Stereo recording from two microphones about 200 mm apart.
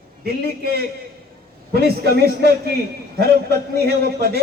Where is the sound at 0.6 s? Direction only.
50° right (ahead or behind).